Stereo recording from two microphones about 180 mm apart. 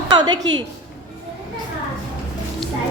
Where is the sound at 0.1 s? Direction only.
25° right (ahead or behind).